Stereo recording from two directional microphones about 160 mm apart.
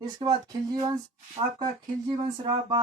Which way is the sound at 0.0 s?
25° right (ahead or behind).